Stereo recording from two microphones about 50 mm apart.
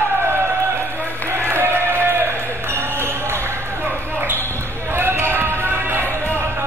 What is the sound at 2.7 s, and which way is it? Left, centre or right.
Basketball bounce, right.